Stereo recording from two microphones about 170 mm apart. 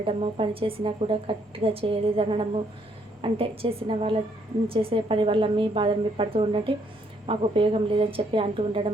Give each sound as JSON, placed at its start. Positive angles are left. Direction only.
{"t": 0.0, "sound": "a woman's voice", "side_deg": -35}